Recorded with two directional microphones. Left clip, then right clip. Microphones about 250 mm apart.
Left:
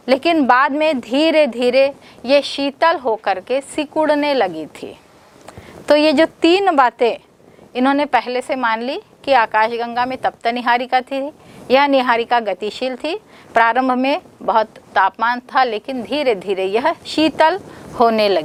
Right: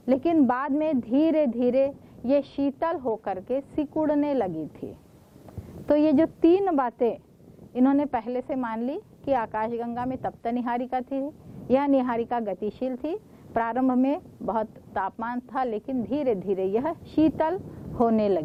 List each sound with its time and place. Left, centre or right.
0.0 s a woman's voice: centre